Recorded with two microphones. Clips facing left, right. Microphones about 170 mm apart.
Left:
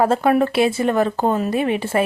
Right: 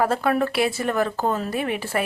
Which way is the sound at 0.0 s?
25° left (ahead or behind).